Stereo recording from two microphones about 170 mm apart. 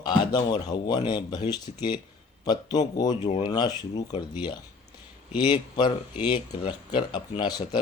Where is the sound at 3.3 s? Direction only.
40° left (ahead or behind).